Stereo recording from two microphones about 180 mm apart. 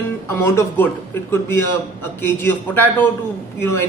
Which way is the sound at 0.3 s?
15° left (ahead or behind).